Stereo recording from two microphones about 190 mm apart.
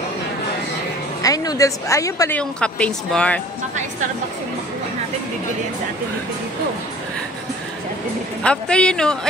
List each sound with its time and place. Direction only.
1.2 s a woman's voice: 20° left (ahead or behind)
8.5 s a man's voice: 5° left (ahead or behind)